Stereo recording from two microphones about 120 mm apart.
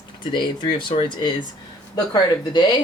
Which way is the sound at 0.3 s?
40° left (ahead or behind).